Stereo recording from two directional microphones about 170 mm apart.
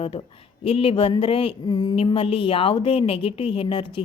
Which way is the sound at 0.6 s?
35° left (ahead or behind).